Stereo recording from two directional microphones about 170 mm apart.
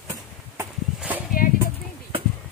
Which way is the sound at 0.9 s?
10° right (ahead or behind).